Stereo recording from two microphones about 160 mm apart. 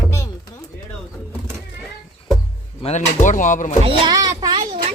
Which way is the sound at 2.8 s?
45° left (ahead or behind).